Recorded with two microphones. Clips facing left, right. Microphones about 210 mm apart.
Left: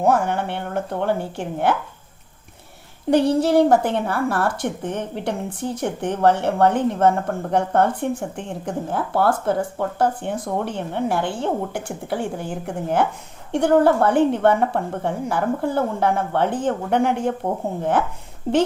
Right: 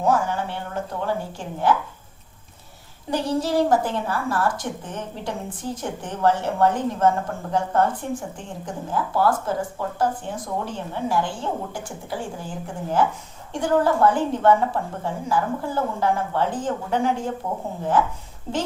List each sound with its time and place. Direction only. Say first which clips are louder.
0.0 s speech: left 3 dB; 60° left (ahead or behind)
3.1 s speech: left 7 dB; 60° left (ahead or behind)